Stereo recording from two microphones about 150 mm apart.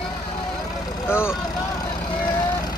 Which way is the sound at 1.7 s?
25° left (ahead or behind).